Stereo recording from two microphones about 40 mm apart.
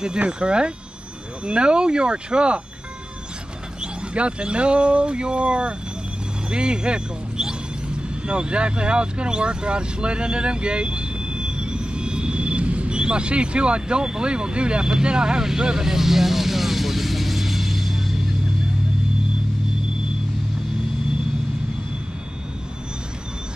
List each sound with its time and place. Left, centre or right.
0.3 s speech: right
3.8 s speech: right; by 18.1 s centre